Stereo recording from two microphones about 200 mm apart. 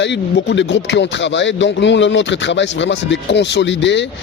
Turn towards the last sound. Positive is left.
turn(degrees=65)  # may be behind; listen again after turning